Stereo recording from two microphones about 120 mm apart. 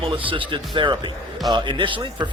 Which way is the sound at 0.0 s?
45° right (ahead or behind).